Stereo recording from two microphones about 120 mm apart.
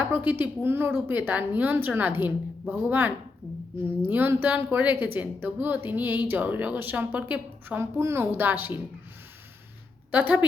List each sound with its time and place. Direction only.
0.0 s a woman's voice: 15° right (ahead or behind)
4.1 s a woman's voice: 15° right (ahead or behind)
10.1 s a woman's voice: 15° right (ahead or behind)